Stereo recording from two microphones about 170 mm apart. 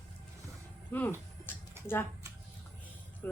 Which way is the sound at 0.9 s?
10° left (ahead or behind).